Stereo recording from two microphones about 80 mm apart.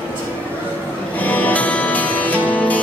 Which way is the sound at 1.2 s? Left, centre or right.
Left.